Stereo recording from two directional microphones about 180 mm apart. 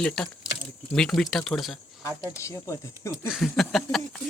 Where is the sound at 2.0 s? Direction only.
20° left (ahead or behind).